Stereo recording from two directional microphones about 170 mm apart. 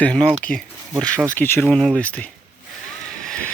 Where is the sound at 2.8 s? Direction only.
5° left (ahead or behind).